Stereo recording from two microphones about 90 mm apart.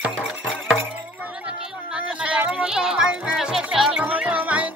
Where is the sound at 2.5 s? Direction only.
5° right (ahead or behind).